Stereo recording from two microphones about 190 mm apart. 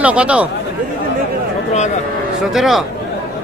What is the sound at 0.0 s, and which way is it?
Speech, 5° right (ahead or behind).